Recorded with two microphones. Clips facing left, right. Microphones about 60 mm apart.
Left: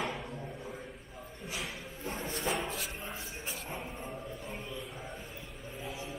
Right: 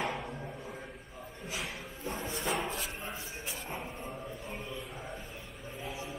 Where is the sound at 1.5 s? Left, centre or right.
Centre.